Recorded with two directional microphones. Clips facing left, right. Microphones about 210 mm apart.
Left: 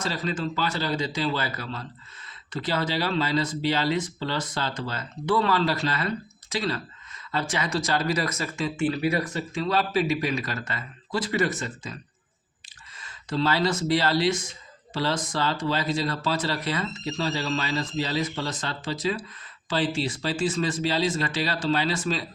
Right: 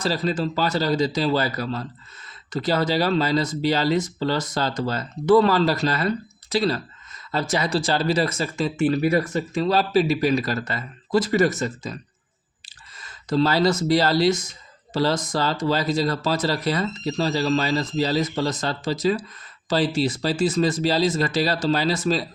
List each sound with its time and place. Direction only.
0.0 s speech: 35° right (ahead or behind)